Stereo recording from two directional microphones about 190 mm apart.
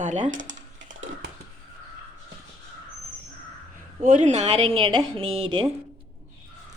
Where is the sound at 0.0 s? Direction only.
40° right (ahead or behind).